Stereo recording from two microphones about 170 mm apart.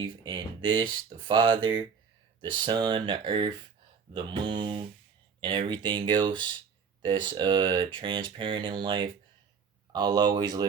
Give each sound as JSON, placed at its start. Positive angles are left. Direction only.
{"t": 0.0, "sound": "speech", "side_deg": -30}